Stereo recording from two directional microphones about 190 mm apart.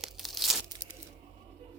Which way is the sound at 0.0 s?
Centre (ahead or behind).